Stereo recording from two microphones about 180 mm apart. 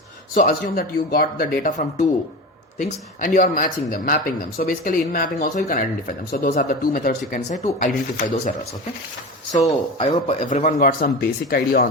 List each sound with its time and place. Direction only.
0.3 s speech: 50° left (ahead or behind)
1.6 s speech: 45° left (ahead or behind)
3.2 s speech: 50° left (ahead or behind)
9.5 s speech: 35° left (ahead or behind); by 11.9 s 55° left (ahead or behind)